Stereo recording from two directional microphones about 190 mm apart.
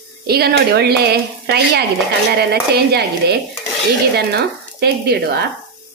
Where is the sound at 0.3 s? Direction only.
55° right (ahead or behind).